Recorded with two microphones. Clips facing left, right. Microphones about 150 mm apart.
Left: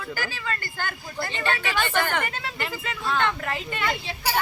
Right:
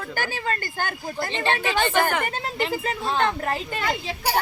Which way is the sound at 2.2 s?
30° right (ahead or behind).